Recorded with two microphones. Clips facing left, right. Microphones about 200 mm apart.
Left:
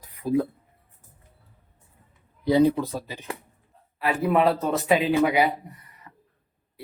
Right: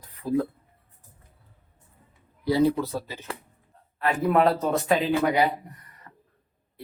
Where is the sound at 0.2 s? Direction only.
15° left (ahead or behind).